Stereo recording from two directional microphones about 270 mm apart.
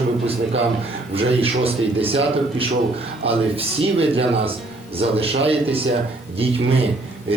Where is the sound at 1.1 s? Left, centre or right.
Right.